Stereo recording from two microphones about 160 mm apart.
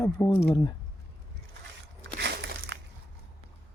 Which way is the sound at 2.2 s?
90° right.